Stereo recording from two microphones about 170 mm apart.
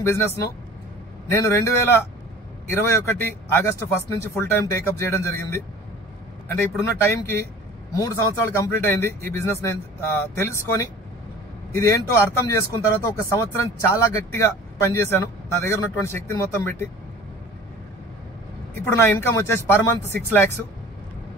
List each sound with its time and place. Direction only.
0.0 s speech: 15° left (ahead or behind)
2.7 s speech: 15° left (ahead or behind)
18.9 s speech: 15° left (ahead or behind)